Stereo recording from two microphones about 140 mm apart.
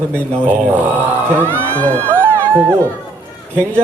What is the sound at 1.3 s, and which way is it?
Speech, 15° right (ahead or behind).